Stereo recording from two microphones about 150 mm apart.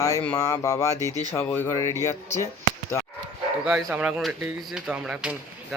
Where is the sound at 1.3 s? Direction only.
15° left (ahead or behind).